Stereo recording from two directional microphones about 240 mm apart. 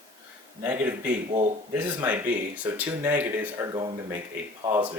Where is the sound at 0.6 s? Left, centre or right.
Centre.